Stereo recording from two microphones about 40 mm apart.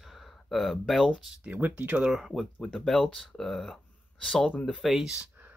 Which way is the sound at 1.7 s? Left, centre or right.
Right.